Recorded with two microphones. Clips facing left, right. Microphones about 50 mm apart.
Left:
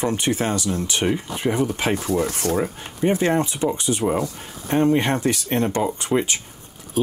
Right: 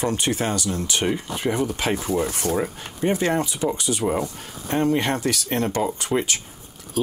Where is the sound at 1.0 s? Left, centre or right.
Centre.